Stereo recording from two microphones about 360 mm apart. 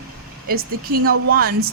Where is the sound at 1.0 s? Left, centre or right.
Right.